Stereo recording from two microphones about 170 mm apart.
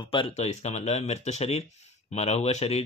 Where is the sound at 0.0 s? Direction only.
30° left (ahead or behind).